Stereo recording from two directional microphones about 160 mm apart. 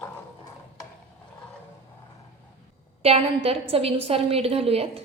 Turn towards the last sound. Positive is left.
turn(degrees=-40)  # may be behind; listen again after turning